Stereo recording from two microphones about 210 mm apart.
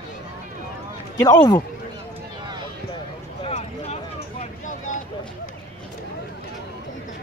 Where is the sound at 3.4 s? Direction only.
30° left (ahead or behind).